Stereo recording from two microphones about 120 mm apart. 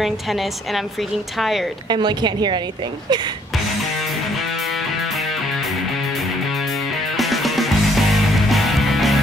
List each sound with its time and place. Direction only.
0.0 s a woman's voice: centre (ahead or behind)
1.9 s a woman's voice: 40° right (ahead or behind)
4.0 s music: centre (ahead or behind)